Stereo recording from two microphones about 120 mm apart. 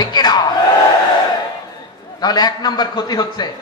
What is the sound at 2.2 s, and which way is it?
A man's voice, 35° left (ahead or behind).